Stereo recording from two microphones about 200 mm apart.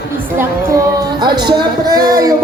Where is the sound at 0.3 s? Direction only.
15° right (ahead or behind).